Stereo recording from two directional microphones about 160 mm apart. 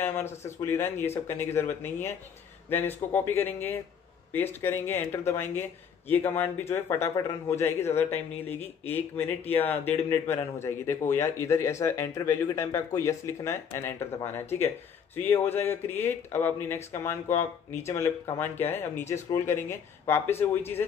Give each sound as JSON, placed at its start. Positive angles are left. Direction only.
{"t": 0.0, "sound": "speech", "side_deg": 15}